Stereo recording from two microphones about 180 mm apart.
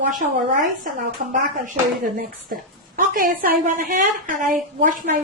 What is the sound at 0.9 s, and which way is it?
Speech, 50° right (ahead or behind).